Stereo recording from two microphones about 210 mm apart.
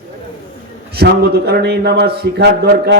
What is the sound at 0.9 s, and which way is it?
A man's voice, 50° right (ahead or behind).